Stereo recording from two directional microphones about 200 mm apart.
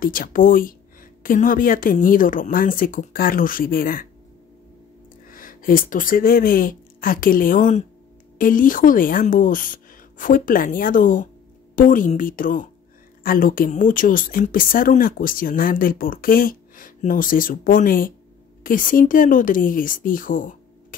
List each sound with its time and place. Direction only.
0.0 s speech: 45° left (ahead or behind)
5.3 s speech: 45° left (ahead or behind)